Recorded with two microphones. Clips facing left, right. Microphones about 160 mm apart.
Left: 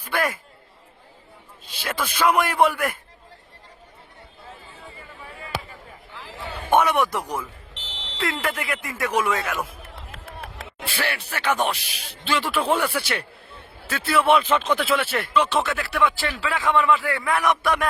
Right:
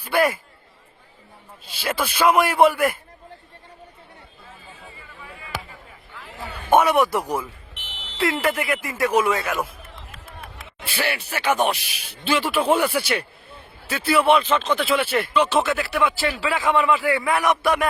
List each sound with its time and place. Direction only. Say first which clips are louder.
0.0 s speech: right 5 dB; 10° right (ahead or behind)
1.8 s a man's voice: right 2 dB; 10° right (ahead or behind)
6.7 s a man's voice: right 3 dB; 5° right (ahead or behind)
10.2 s a sound: left 5 dB; 90° left
10.8 s a man's voice: right 2 dB; 5° right (ahead or behind)
14.8 s speech: right 2 dB; centre (ahead or behind)